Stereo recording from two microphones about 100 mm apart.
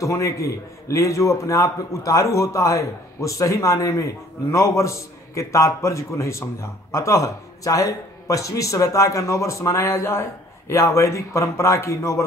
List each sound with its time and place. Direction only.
0.0 s a man's voice: 30° left (ahead or behind)